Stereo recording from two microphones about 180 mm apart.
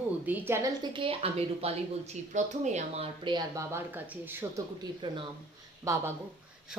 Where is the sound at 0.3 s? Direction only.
15° right (ahead or behind).